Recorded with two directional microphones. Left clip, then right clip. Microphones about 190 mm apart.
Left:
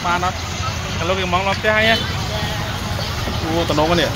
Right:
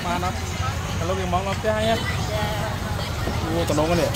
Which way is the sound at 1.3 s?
15° left (ahead or behind).